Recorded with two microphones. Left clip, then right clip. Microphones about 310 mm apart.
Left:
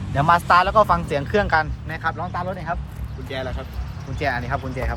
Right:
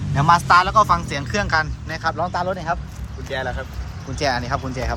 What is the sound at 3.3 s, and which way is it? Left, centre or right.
Speech, right.